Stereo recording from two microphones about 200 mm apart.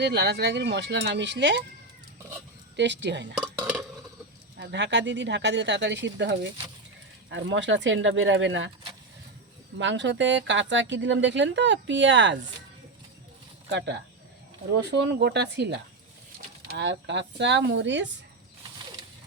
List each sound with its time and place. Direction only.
0.0 s speech: 55° right (ahead or behind)
2.7 s speech: 60° right (ahead or behind)
3.4 s dishes: 10° right (ahead or behind)
4.5 s speech: 60° right (ahead or behind)
9.7 s speech: 65° right (ahead or behind)
13.7 s speech: 60° right (ahead or behind)